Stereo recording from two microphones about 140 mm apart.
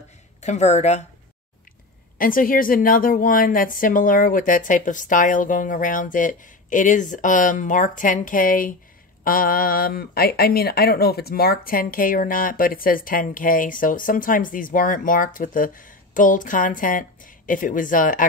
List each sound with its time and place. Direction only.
0.4 s a woman's voice: 55° left (ahead or behind)
2.1 s speech: 85° left
9.2 s speech: 90° left; by 18.2 s 70° left (ahead or behind)